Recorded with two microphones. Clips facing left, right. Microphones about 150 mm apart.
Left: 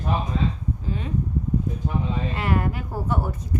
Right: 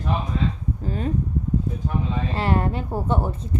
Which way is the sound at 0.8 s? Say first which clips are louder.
Right 6 dB; 45° right (ahead or behind).